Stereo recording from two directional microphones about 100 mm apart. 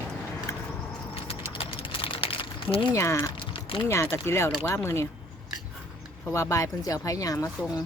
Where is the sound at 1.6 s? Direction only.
60° left (ahead or behind).